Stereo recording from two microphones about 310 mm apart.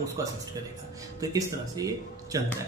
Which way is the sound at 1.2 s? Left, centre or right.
Centre.